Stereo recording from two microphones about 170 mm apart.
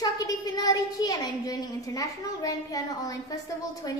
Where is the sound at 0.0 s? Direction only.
20° left (ahead or behind).